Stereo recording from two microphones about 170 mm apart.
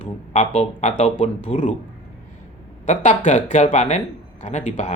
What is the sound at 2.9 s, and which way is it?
Speech, 45° left (ahead or behind).